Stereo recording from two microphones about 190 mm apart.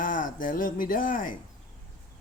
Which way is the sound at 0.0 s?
45° left (ahead or behind).